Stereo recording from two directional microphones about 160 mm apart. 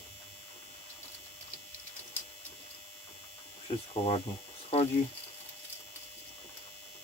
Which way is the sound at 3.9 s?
40° left (ahead or behind).